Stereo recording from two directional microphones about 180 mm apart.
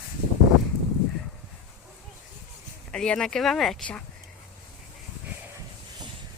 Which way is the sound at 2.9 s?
5° left (ahead or behind).